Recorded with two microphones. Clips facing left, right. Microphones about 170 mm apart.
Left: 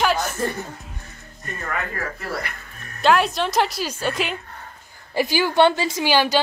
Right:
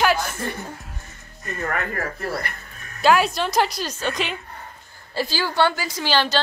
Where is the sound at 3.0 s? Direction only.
5° right (ahead or behind).